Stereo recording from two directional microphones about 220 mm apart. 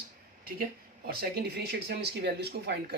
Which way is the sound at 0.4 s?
40° right (ahead or behind).